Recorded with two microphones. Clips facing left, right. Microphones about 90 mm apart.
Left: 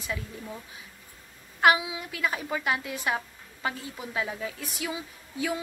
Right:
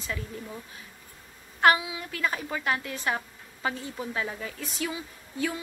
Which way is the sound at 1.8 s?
20° left (ahead or behind).